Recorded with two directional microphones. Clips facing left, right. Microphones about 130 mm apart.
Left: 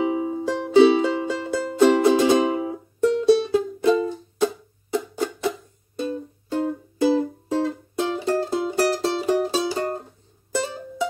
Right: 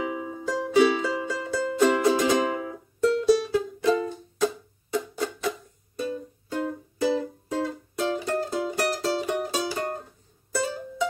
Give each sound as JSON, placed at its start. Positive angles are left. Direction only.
{"t": 0.0, "sound": "music", "side_deg": 25}